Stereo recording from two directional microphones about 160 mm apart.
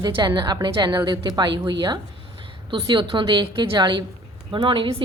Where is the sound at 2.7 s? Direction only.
30° right (ahead or behind).